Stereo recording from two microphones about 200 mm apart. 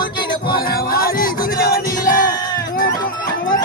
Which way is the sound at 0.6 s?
50° left (ahead or behind).